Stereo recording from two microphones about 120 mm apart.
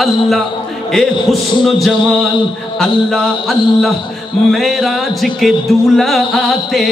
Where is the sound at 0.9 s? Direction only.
Centre (ahead or behind).